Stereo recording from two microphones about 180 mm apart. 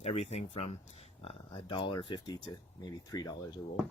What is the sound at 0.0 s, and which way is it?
Speech, 35° left (ahead or behind).